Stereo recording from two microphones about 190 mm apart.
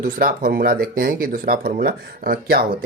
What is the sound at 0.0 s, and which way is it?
Speech, 50° right (ahead or behind).